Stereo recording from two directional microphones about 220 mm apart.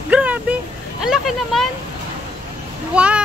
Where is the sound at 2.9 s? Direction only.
5° right (ahead or behind).